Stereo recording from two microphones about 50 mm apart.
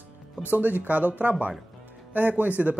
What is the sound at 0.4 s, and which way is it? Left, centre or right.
Speech, right.